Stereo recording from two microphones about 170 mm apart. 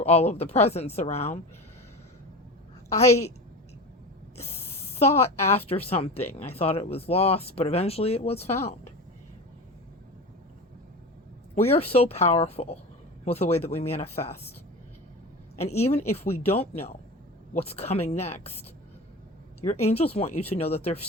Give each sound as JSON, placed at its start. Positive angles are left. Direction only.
{"t": 0.0, "sound": "speech", "side_deg": 40}
{"t": 4.9, "sound": "a woman's voice", "side_deg": 40}
{"t": 11.6, "sound": "speech", "side_deg": 35}
{"t": 15.5, "sound": "speech", "side_deg": 40}
{"t": 19.6, "sound": "speech", "side_deg": 35}